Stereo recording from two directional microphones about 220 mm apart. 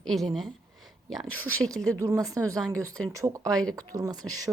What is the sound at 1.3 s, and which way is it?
Speech, 70° right (ahead or behind).